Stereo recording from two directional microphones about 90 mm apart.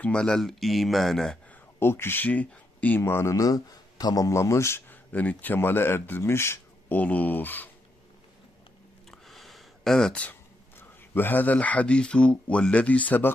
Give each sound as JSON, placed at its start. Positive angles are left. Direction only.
{"t": 0.0, "sound": "speech", "side_deg": 10}
{"t": 1.5, "sound": "speech", "side_deg": 25}
{"t": 3.0, "sound": "speech", "side_deg": 30}
{"t": 7.0, "sound": "speech", "side_deg": 15}
{"t": 9.1, "sound": "a sound", "side_deg": 0}
{"t": 10.8, "sound": "speech", "side_deg": 25}